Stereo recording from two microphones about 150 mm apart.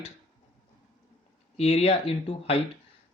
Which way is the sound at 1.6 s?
45° left (ahead or behind).